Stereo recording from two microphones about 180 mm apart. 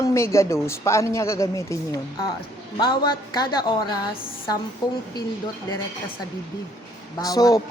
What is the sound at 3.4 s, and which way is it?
Speech, 25° left (ahead or behind).